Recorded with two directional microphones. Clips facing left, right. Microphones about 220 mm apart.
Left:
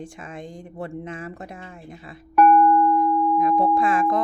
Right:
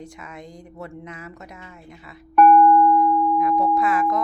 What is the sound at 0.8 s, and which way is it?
Speech, 30° left (ahead or behind).